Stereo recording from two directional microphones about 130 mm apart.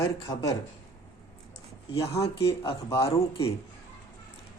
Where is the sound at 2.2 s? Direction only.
50° left (ahead or behind).